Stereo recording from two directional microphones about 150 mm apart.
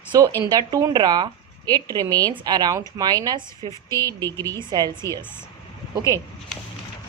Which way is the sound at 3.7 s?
20° left (ahead or behind).